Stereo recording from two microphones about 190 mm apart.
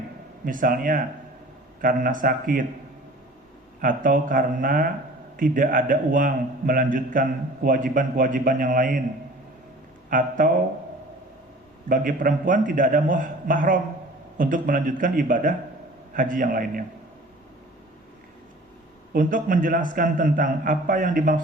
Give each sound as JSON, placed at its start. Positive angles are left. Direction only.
{"t": 0.4, "sound": "a man's voice", "side_deg": -45}
{"t": 3.8, "sound": "a man's voice", "side_deg": -45}
{"t": 10.1, "sound": "a man's voice", "side_deg": -45}
{"t": 11.9, "sound": "a man's voice", "side_deg": -45}
{"t": 19.1, "sound": "a man's voice", "side_deg": -45}